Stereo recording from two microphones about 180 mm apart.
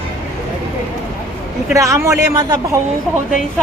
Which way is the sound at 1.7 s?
15° right (ahead or behind).